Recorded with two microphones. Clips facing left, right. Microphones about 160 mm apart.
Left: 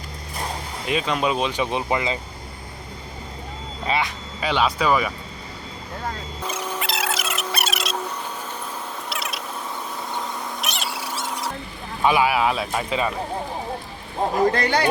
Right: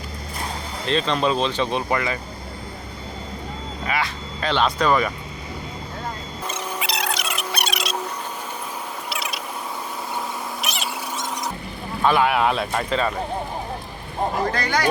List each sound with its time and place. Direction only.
0.9 s speech: 10° left (ahead or behind)
3.8 s speech: 25° left (ahead or behind)
4.4 s speech: 5° left (ahead or behind)
6.7 s a sound: centre (ahead or behind)
7.5 s insect: centre (ahead or behind)
9.0 s mechanisms: centre (ahead or behind)
10.6 s cat: centre (ahead or behind)
11.2 s mouse: 5° left (ahead or behind)
12.0 s speech: 5° left (ahead or behind)
14.5 s speech: 30° left (ahead or behind)